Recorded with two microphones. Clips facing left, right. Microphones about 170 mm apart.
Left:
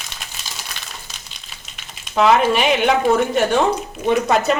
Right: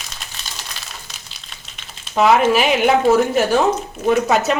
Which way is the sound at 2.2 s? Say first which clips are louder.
Right 1 dB; 5° right (ahead or behind).